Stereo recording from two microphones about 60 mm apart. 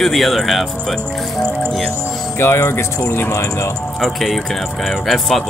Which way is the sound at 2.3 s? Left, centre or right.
Left.